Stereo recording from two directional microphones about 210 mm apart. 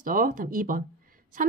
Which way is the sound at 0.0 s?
40° right (ahead or behind).